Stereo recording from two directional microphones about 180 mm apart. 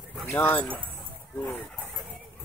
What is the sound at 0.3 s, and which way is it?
Speech, 10° left (ahead or behind).